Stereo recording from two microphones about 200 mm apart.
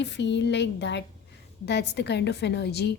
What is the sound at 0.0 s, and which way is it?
A woman's voice, 60° left (ahead or behind).